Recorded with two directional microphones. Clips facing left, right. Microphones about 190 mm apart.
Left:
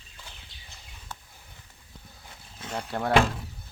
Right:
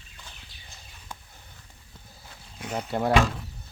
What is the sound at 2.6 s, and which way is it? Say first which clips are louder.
Speech: right 3 dB; 10° right (ahead or behind).